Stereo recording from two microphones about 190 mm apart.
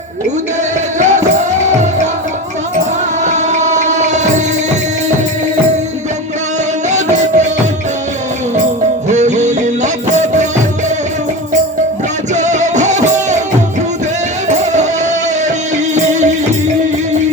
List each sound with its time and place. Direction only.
0.9 s music: 40° right (ahead or behind)
3.2 s music: 40° right (ahead or behind)
6.9 s music: 40° right (ahead or behind)
9.0 s music: 40° right (ahead or behind)
12.3 s music: 40° right (ahead or behind)
14.5 s music: 40° right (ahead or behind)
16.0 s music: 40° right (ahead or behind)